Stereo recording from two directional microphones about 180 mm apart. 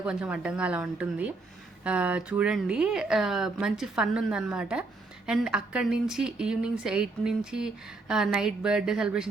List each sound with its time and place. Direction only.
0.0 s speech: 5° right (ahead or behind)